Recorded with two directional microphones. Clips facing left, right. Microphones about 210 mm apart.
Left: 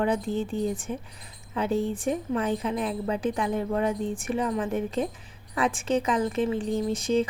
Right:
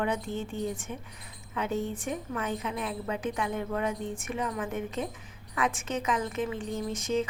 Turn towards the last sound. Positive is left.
turn(degrees=30)  # may be behind; listen again after turning